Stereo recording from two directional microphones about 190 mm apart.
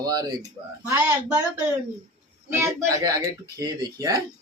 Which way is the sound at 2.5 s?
15° right (ahead or behind).